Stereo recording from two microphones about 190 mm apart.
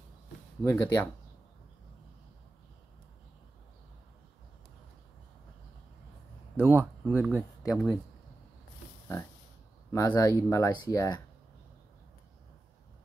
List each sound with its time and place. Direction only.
0.7 s speech: 20° left (ahead or behind)
6.5 s speech: 10° right (ahead or behind)
9.8 s speech: 20° left (ahead or behind)